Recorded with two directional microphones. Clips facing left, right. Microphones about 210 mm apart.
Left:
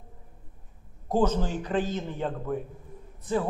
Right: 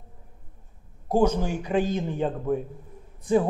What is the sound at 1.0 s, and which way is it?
A man's voice, 10° right (ahead or behind).